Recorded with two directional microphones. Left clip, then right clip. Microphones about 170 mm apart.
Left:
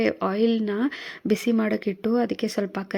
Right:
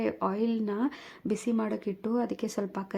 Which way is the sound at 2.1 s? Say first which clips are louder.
Left 6 dB; 15° left (ahead or behind).